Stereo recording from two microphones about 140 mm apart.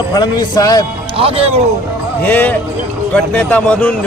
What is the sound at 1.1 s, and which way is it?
Speech, 40° right (ahead or behind).